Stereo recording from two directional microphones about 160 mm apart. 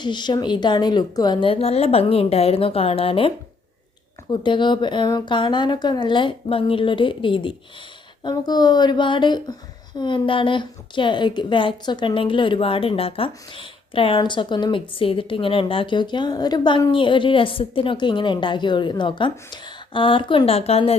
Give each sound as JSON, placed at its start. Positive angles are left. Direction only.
{"t": 0.0, "sound": "a woman's voice", "side_deg": 30}